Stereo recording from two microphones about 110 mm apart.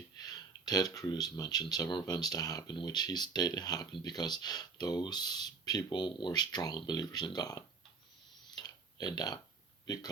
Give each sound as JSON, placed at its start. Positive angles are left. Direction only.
{"t": 0.2, "sound": "speech", "side_deg": 35}
{"t": 8.5, "sound": "a sound", "side_deg": 40}
{"t": 9.8, "sound": "a man's voice", "side_deg": 35}